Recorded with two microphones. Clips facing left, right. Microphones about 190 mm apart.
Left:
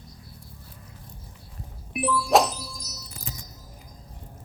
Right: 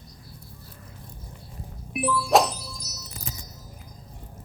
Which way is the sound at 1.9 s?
Centre (ahead or behind).